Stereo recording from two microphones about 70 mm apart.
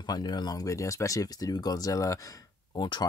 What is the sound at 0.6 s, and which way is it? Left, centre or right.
Speech, left.